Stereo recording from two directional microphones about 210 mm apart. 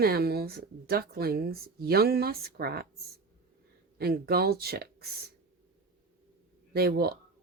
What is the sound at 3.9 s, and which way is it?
Speech, 50° right (ahead or behind).